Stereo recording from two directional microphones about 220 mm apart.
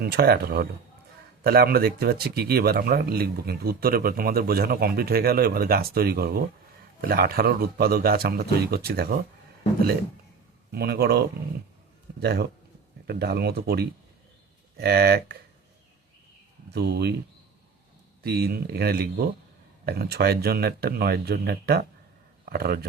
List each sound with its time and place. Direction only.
0.0 s a man's voice: 45° right (ahead or behind)
10.7 s a man's voice: 45° right (ahead or behind)
16.7 s a man's voice: 50° right (ahead or behind)
18.2 s a man's voice: 45° right (ahead or behind)